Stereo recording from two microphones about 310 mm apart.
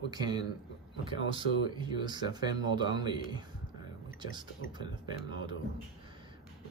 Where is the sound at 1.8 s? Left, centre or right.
Centre.